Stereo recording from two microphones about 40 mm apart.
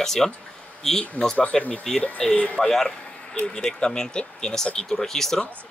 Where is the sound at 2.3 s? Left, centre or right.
Left.